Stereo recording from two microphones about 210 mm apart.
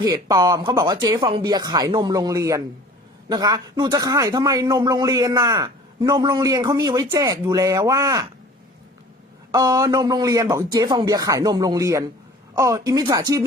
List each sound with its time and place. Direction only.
0.0 s a man's voice: 20° right (ahead or behind)
9.5 s a man's voice: 20° right (ahead or behind)